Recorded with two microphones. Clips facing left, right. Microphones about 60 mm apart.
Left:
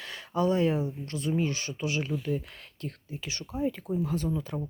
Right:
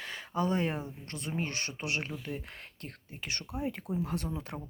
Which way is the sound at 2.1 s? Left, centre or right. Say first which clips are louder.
Left 8 dB; right.